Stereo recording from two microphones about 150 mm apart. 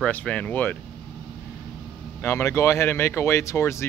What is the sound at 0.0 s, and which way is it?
Speech, 10° left (ahead or behind).